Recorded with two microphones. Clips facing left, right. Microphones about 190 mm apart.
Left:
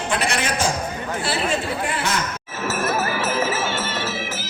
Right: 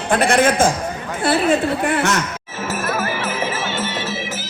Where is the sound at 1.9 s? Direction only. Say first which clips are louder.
Right 6 dB; 75° right (ahead or behind).